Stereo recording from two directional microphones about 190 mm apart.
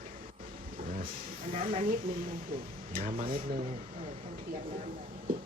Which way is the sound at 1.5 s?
45° right (ahead or behind).